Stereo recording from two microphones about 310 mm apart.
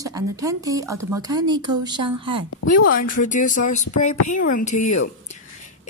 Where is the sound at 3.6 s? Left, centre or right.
Left.